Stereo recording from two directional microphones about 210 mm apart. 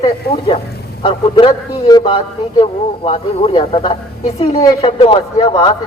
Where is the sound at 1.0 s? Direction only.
25° left (ahead or behind).